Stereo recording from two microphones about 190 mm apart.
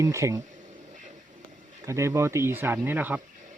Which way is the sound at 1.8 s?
15° right (ahead or behind).